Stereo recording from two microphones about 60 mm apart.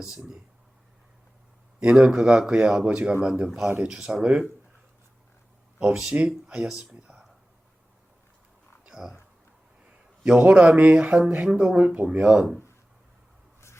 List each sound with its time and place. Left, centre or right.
0.0 s speech: centre
1.8 s speech: centre
5.8 s speech: centre
8.8 s a sound: centre
10.2 s speech: right